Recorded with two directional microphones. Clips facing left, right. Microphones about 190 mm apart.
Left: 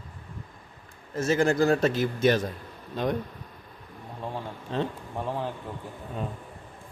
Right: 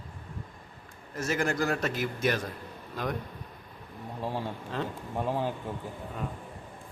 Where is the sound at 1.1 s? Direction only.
25° left (ahead or behind).